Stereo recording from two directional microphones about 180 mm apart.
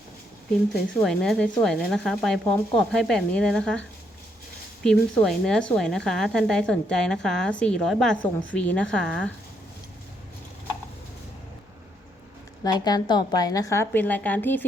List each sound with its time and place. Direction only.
1.0 s a woman's voice: 5° left (ahead or behind)
12.6 s a woman's voice: 20° left (ahead or behind)